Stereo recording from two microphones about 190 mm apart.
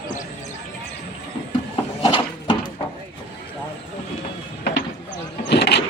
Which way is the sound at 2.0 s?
30° left (ahead or behind).